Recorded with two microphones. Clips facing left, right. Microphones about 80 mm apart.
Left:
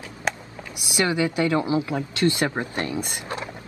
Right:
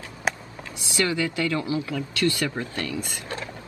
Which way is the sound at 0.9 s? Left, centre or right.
Left.